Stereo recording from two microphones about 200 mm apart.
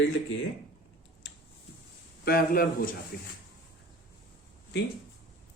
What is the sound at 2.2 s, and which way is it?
Speech, 45° left (ahead or behind).